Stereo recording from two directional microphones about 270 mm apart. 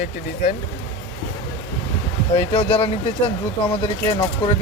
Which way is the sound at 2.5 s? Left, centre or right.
Centre.